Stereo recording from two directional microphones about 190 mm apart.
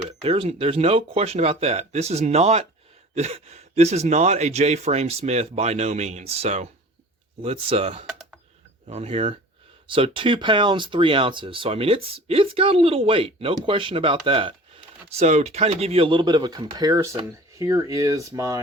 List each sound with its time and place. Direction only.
0.2 s speech: 30° right (ahead or behind)